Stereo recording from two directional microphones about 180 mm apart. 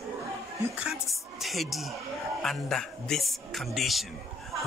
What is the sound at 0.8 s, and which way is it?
Speech, centre (ahead or behind).